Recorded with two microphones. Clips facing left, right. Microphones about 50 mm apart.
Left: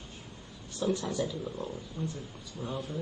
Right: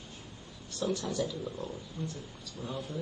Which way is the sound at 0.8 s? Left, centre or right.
Centre.